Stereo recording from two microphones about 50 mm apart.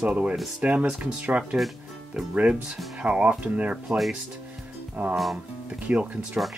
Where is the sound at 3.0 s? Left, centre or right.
Right.